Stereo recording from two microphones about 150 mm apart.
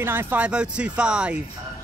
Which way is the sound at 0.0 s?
15° right (ahead or behind).